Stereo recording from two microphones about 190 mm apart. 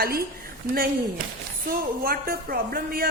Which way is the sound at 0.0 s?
50° right (ahead or behind).